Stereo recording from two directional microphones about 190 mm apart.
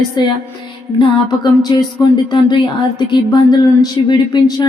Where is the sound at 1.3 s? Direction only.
20° left (ahead or behind).